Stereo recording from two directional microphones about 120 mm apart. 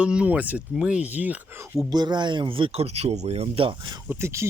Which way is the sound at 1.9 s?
35° right (ahead or behind).